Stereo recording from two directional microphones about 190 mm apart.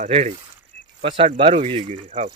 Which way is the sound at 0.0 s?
35° right (ahead or behind).